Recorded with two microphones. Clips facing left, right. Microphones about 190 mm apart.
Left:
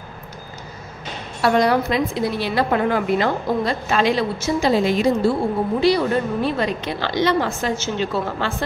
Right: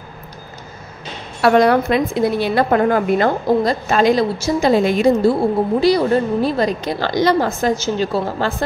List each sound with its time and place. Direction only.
1.4 s a woman's voice: 60° right (ahead or behind)
5.8 s a woman's voice: 40° right (ahead or behind)